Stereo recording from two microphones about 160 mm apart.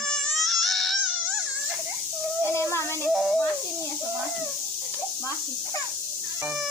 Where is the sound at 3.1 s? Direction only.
Centre (ahead or behind).